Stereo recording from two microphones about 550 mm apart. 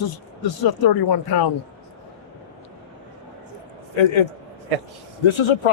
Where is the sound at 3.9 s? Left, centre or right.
Left.